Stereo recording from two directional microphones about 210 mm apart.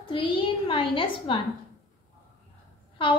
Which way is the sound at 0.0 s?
25° left (ahead or behind).